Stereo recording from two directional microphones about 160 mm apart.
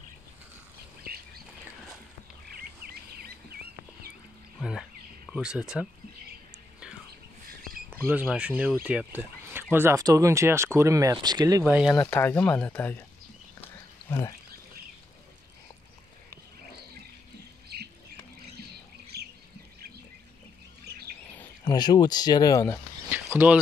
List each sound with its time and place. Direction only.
2.5 s chirp: 70° right (ahead or behind)
4.6 s bird: 5° right (ahead or behind)
5.3 s speech: 5° right (ahead or behind)
7.9 s speech: 10° right (ahead or behind)
11.6 s speech: 10° right (ahead or behind)
12.1 s speech: 10° left (ahead or behind)
14.0 s speech: 15° left (ahead or behind)
17.7 s rodents: 90° right
19.1 s a sound: 90° right
21.6 s speech: 25° left (ahead or behind)
23.3 s speech: 10° right (ahead or behind)